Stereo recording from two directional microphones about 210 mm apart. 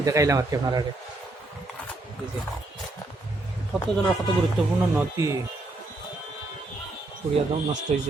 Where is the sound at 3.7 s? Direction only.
Centre (ahead or behind).